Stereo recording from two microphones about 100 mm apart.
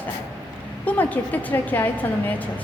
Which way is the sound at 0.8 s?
15° left (ahead or behind).